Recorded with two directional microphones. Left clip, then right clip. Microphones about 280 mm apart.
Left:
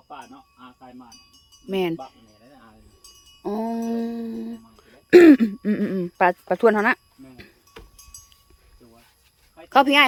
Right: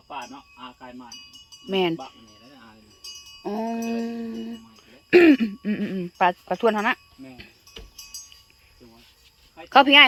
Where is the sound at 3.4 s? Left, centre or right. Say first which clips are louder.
Left 2 dB; centre.